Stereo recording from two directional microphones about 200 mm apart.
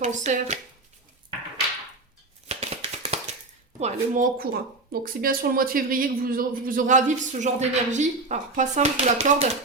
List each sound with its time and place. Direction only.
0.0 s speech: 35° right (ahead or behind)
2.5 s a sound: 30° right (ahead or behind)
3.8 s speech: 35° right (ahead or behind)